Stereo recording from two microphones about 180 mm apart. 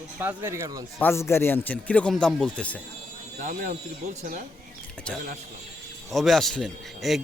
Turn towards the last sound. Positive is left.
turn(degrees=0)  # may be behind; listen again after turning